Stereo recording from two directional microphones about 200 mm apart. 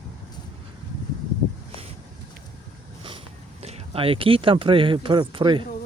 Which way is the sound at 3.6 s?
30° right (ahead or behind).